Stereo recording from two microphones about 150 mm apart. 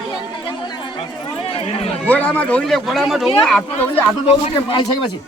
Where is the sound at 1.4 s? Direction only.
40° left (ahead or behind).